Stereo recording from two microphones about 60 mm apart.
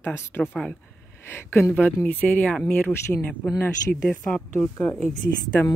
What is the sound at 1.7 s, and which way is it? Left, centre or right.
Speech, left.